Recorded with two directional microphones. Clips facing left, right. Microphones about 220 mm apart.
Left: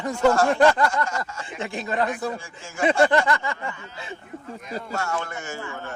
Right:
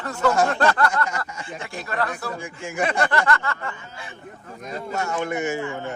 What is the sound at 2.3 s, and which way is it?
Speech, 20° right (ahead or behind).